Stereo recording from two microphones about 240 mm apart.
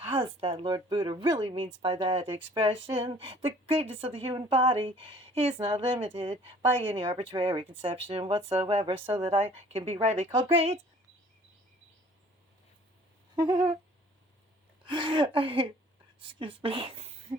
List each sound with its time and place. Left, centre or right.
0.0 s speech: right
13.3 s humming: centre
14.8 s speech: centre